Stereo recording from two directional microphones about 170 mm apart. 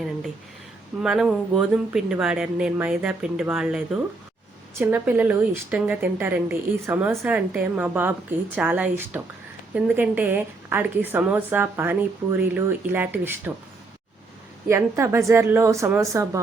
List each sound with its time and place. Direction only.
1.0 s a woman's voice: 5° right (ahead or behind)
14.7 s a woman's voice: 15° right (ahead or behind)